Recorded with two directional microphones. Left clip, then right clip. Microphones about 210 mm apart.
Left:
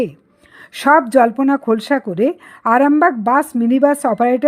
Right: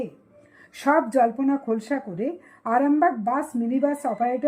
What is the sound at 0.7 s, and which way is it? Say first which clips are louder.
Speech: left 9 dB; 30° left (ahead or behind).